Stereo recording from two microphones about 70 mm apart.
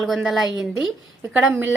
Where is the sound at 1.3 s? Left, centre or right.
Centre.